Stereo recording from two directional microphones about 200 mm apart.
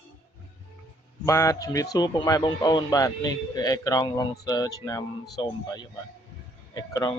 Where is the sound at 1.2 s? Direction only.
15° left (ahead or behind).